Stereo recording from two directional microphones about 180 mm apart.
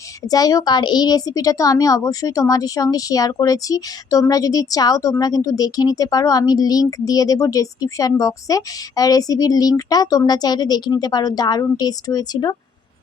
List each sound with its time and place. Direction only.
0.3 s a woman's voice: 20° left (ahead or behind)